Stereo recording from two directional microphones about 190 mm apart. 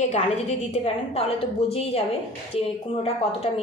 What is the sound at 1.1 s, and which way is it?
A woman's voice, 30° left (ahead or behind).